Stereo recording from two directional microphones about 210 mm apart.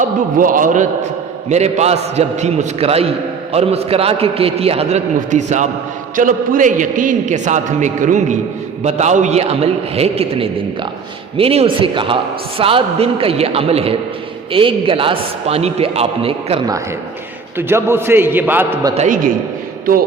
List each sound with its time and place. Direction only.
0.3 s a man's voice: 40° right (ahead or behind); by 18.9 s 15° right (ahead or behind)
18.9 s a man's voice: 40° right (ahead or behind)